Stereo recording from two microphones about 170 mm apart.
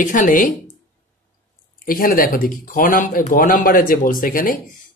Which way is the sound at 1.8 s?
55° left (ahead or behind).